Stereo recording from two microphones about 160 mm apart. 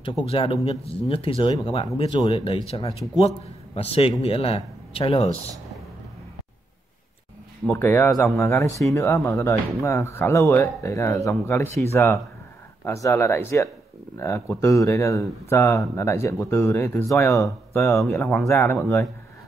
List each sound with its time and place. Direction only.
0.3 s a man's voice: 35° left (ahead or behind)
7.7 s speech: 15° left (ahead or behind)